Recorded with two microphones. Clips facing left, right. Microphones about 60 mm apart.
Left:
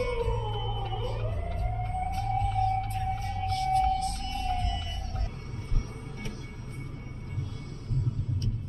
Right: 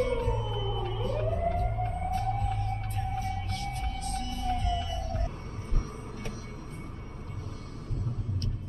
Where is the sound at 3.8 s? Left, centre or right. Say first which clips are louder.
Left 7 dB; left.